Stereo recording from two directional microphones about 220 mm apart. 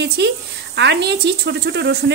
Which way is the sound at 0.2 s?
50° right (ahead or behind).